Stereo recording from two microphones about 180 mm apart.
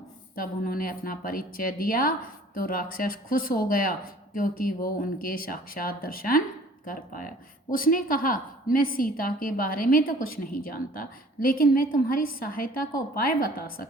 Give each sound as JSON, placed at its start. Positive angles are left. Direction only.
{"t": 0.3, "sound": "a woman's voice", "side_deg": 50}